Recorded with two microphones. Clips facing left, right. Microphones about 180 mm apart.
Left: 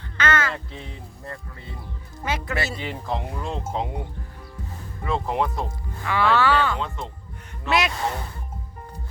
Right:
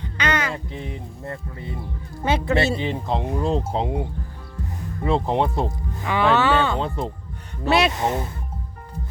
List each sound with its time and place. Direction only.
0.0 s music: 15° right (ahead or behind)
1.2 s speech: 20° right (ahead or behind)
5.0 s speech: 30° right (ahead or behind)
6.0 s speech: 20° right (ahead or behind)